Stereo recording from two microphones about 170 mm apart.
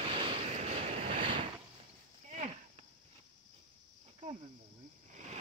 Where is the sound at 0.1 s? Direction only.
35° right (ahead or behind).